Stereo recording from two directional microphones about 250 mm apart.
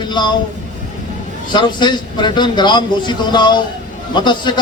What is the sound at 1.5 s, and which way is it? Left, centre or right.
A man's voice, centre.